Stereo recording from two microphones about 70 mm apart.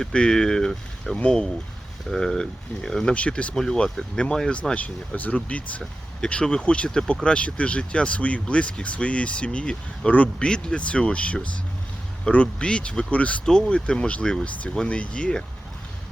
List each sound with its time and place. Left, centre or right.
0.0 s speech: centre